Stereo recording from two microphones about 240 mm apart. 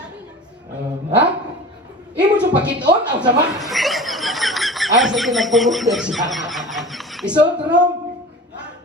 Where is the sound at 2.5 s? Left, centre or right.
Centre.